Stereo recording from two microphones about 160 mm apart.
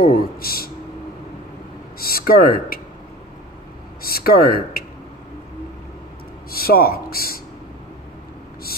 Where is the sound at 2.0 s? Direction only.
65° left (ahead or behind).